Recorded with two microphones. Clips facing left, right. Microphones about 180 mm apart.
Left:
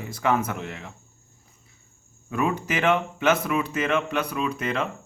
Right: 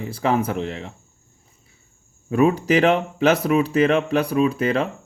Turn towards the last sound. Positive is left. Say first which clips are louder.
# right 8 dB
turn(degrees=-30)  # may be behind; listen again after turning